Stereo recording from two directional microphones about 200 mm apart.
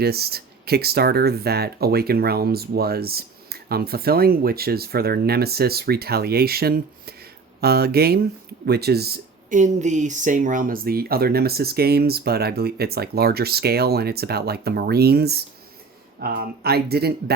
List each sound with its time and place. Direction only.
0.0 s speech: 50° right (ahead or behind)